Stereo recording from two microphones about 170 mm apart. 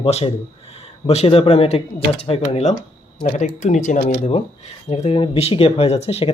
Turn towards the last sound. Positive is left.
turn(degrees=35)  # may be behind; listen again after turning